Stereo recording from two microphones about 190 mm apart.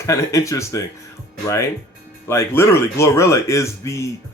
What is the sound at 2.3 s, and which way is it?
Speech, 15° left (ahead or behind).